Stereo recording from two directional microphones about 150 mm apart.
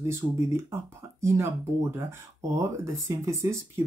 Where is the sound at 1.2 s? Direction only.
15° right (ahead or behind).